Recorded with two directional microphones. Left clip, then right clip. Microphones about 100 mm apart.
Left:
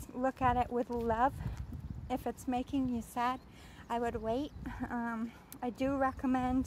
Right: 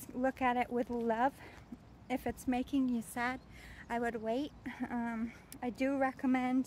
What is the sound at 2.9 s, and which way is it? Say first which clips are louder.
A woman's voice: left 3 dB; 15° right (ahead or behind).